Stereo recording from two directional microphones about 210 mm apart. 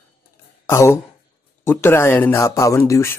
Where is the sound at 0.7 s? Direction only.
15° left (ahead or behind).